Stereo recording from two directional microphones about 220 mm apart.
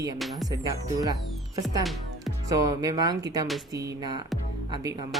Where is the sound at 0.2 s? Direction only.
Centre (ahead or behind).